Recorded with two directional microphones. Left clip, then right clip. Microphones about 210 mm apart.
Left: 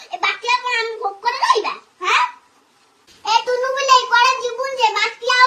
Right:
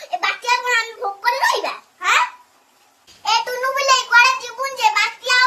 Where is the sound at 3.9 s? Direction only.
20° right (ahead or behind).